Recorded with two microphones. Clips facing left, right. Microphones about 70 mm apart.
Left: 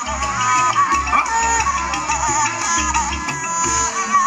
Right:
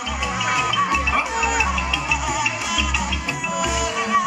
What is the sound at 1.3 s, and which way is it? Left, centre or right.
Music, left.